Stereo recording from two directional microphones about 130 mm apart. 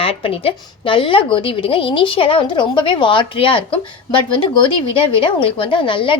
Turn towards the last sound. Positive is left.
turn(degrees=40)  # may be behind; listen again after turning